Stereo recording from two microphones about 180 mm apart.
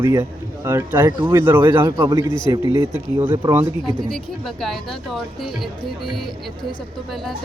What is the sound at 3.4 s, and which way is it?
Speech, 25° right (ahead or behind).